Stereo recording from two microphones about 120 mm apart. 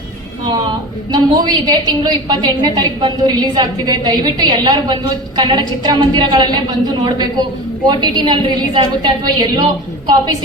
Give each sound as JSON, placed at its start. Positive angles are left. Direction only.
{"t": 1.1, "sound": "a woman's voice", "side_deg": -35}